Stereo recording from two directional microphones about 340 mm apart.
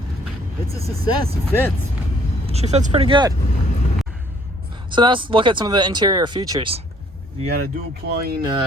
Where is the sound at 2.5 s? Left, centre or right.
Centre.